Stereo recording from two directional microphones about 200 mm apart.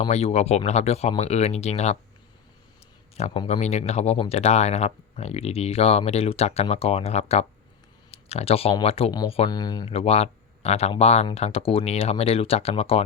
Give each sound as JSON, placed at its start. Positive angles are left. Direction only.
{"t": 0.0, "sound": "speech", "side_deg": 30}
{"t": 3.2, "sound": "speech", "side_deg": 30}